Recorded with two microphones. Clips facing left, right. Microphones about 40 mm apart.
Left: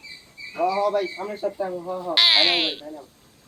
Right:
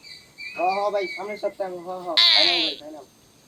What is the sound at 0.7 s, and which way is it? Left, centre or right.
Speech, centre.